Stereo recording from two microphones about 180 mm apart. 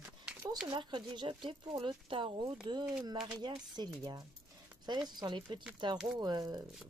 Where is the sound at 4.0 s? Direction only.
20° right (ahead or behind).